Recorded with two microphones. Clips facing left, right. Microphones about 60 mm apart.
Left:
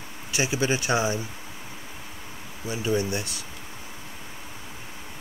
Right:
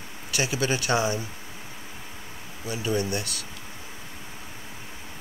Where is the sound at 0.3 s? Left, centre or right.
Left.